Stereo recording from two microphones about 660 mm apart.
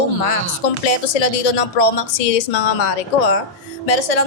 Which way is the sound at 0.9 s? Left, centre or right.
Left.